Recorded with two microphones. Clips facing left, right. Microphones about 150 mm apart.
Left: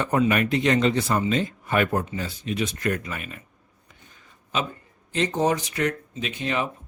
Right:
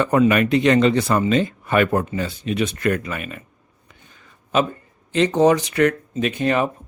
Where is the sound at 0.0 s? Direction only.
80° right.